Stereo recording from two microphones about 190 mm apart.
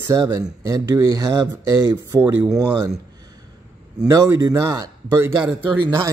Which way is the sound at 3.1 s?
20° right (ahead or behind).